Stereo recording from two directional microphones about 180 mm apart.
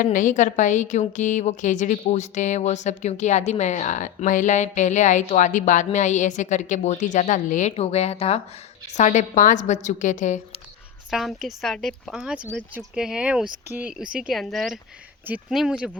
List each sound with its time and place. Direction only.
0.0 s a woman's voice: 45° left (ahead or behind)
11.1 s speech: centre (ahead or behind)